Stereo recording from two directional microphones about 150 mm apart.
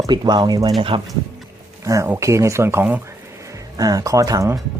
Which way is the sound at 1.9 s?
20° right (ahead or behind).